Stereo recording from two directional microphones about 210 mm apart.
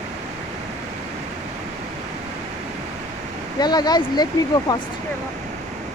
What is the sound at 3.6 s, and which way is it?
Speech, 20° left (ahead or behind).